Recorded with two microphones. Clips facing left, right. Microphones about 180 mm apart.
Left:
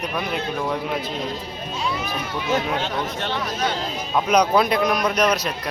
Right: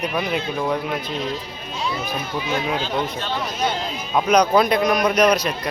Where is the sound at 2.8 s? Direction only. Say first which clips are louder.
Right 1 dB; 70° left (ahead or behind).